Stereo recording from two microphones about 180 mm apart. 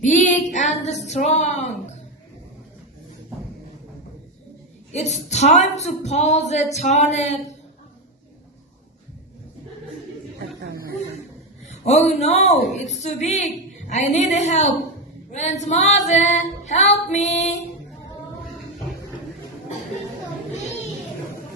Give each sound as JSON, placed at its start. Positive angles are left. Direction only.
{"t": 0.2, "sound": "female singing", "side_deg": 40}
{"t": 4.9, "sound": "female singing", "side_deg": 40}
{"t": 11.7, "sound": "female singing", "side_deg": 40}